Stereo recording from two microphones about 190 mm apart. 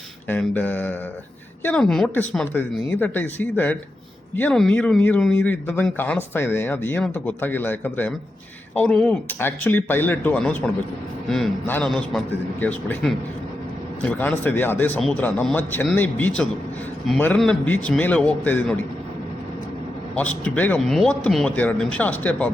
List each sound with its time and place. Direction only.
0.3 s a man's voice: 10° left (ahead or behind)
20.1 s speech: 5° left (ahead or behind)